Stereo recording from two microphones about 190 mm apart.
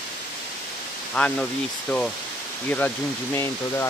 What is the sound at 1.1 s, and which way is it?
Speech, 5° left (ahead or behind).